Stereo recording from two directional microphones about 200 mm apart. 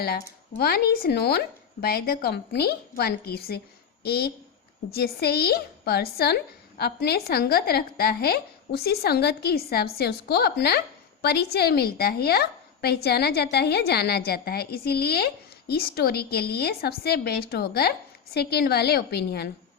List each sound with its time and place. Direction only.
0.0 s a woman's voice: 50° left (ahead or behind)